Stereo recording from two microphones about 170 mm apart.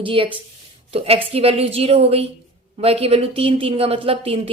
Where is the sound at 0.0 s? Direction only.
30° right (ahead or behind).